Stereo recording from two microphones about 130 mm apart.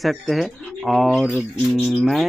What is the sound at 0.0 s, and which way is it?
Speech, centre (ahead or behind).